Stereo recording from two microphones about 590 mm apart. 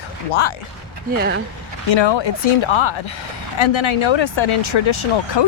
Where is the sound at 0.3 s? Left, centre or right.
Left.